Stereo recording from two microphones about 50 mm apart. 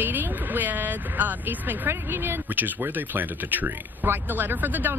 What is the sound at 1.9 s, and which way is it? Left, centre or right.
Speech, right.